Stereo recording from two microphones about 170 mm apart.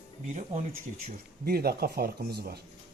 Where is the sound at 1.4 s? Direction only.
65° right (ahead or behind).